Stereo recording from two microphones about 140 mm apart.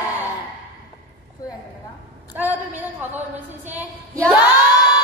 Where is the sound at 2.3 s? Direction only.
15° right (ahead or behind).